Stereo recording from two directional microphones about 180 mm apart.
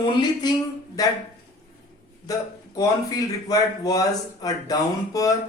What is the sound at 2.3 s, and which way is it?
Speech, 20° left (ahead or behind).